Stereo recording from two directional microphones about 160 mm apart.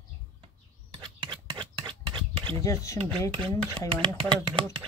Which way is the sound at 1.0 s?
30° right (ahead or behind).